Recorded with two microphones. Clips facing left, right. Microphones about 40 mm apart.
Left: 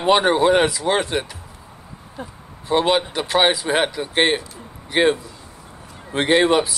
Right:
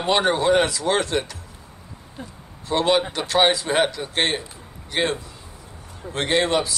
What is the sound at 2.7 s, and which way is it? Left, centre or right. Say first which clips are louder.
A man's voice: left 2 dB; centre.